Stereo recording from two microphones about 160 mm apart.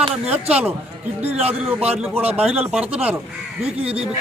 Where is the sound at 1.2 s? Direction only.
40° right (ahead or behind).